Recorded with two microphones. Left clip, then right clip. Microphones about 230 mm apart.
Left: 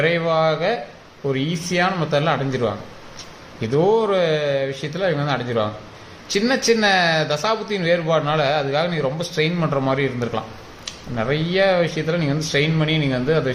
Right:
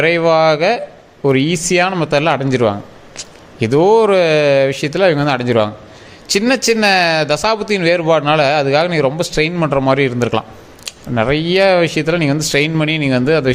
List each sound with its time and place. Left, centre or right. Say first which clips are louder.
0.0 s speech: right 7 dB; right